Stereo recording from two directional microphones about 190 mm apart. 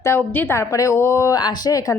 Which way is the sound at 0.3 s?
10° left (ahead or behind).